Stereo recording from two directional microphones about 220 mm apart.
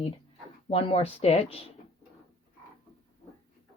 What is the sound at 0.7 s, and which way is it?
Speech, 25° left (ahead or behind).